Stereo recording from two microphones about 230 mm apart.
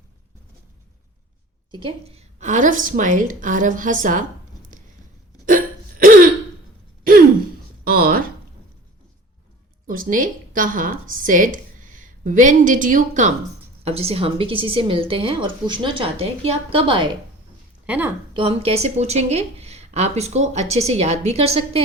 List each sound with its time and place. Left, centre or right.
1.7 s a woman's voice: right
5.5 s hiccup: right
7.0 s a sound: right
9.8 s a woman's voice: right
17.8 s a woman's voice: centre
18.3 s speech: right